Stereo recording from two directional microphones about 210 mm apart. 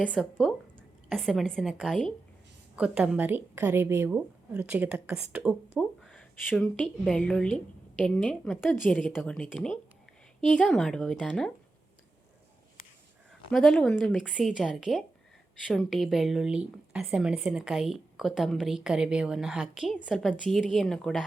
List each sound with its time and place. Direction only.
0.1 s a woman's voice: centre (ahead or behind)
13.5 s speech: centre (ahead or behind)